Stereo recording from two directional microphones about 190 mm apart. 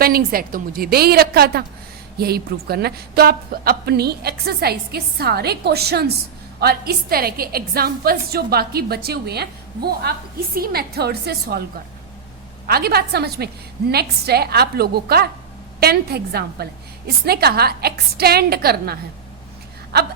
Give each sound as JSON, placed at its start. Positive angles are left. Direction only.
{"t": 0.0, "sound": "a woman's voice", "side_deg": -50}
{"t": 12.6, "sound": "a woman's voice", "side_deg": -55}